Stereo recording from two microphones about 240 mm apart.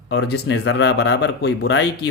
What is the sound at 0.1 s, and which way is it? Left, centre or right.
Speech, left.